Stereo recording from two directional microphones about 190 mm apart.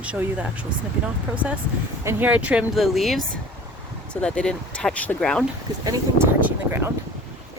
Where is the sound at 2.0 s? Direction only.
10° right (ahead or behind).